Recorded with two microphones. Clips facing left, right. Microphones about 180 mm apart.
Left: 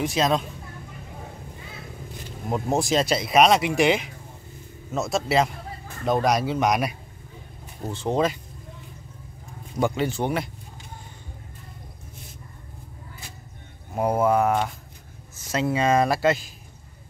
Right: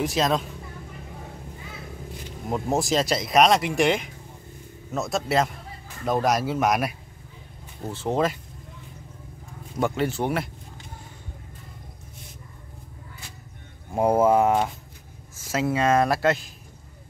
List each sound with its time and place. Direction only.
0.0 s speech: centre (ahead or behind)
2.5 s speech: centre (ahead or behind)
7.9 s speech: 5° right (ahead or behind)
9.8 s speech: centre (ahead or behind)
13.9 s speech: 25° right (ahead or behind)
15.5 s speech: centre (ahead or behind)